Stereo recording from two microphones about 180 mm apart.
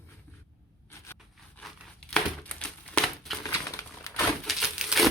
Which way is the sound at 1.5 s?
5° left (ahead or behind).